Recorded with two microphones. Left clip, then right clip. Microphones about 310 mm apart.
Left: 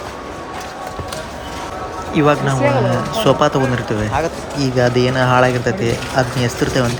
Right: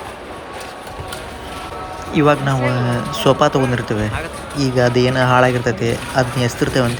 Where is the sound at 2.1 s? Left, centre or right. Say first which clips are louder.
Even; centre.